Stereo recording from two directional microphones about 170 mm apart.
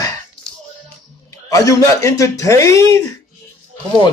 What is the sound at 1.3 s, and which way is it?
Speech, 20° left (ahead or behind).